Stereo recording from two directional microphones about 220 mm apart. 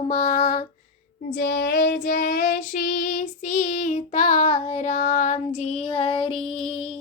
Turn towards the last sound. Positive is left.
turn(degrees=25)  # may be behind; listen again after turning